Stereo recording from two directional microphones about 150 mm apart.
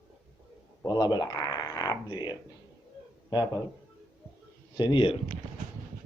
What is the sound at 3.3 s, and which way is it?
Speech, 25° left (ahead or behind).